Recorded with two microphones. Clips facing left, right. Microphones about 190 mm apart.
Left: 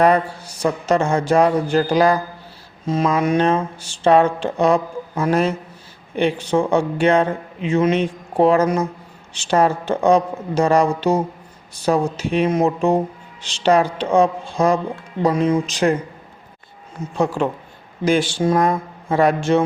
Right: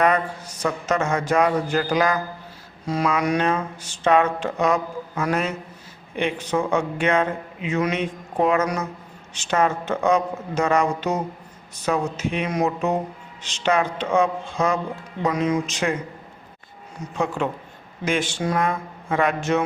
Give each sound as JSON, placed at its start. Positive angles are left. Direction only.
{"t": 0.0, "sound": "speech", "side_deg": 30}
{"t": 17.2, "sound": "speech", "side_deg": 35}